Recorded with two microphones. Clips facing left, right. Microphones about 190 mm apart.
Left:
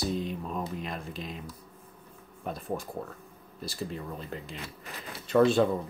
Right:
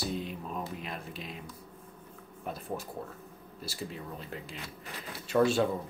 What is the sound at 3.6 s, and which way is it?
Speech, 5° right (ahead or behind).